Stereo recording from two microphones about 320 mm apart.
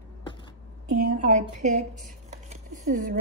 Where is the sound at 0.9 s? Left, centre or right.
Right.